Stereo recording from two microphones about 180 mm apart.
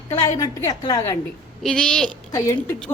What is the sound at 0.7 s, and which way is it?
Speech, 20° left (ahead or behind).